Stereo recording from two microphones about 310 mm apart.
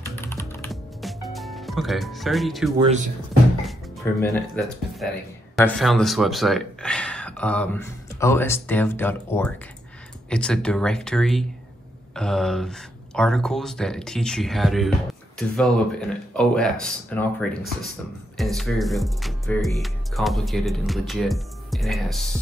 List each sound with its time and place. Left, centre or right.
0.0 s typing: centre
2.8 s speech: right
4.0 s speech: centre